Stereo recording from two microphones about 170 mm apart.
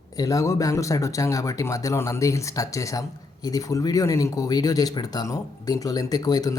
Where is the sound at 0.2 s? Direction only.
20° left (ahead or behind).